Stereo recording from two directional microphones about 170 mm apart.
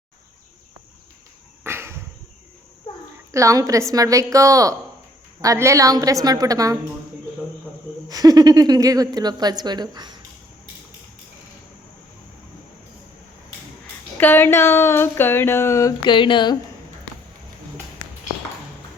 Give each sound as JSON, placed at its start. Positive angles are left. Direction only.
{"t": 1.6, "sound": "a sound", "side_deg": -15}
{"t": 3.3, "sound": "speech", "side_deg": -20}
{"t": 8.0, "sound": "speech", "side_deg": -20}
{"t": 14.2, "sound": "speech", "side_deg": 10}